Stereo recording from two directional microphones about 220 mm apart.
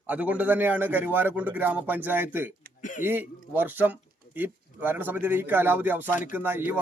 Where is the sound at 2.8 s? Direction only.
35° left (ahead or behind).